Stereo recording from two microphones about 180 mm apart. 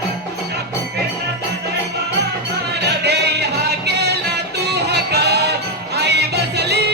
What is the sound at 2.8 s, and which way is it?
Music, 65° right (ahead or behind).